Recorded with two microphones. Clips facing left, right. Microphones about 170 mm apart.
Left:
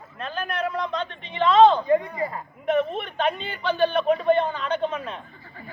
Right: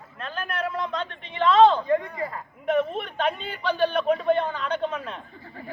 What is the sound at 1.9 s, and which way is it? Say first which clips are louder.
Speech: left 3 dB; 10° left (ahead or behind).